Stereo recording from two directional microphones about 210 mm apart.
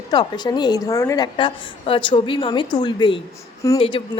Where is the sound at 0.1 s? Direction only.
20° left (ahead or behind).